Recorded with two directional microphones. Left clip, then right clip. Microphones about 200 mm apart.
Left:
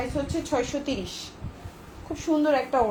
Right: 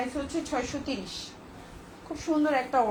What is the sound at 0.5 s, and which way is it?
Speech, 40° left (ahead or behind).